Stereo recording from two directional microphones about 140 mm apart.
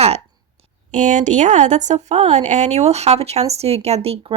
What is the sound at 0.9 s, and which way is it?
Speech, 65° right (ahead or behind).